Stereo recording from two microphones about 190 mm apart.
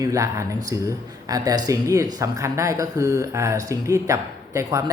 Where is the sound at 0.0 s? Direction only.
15° right (ahead or behind).